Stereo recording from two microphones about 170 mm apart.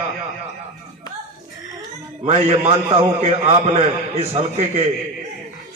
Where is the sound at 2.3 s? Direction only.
35° right (ahead or behind).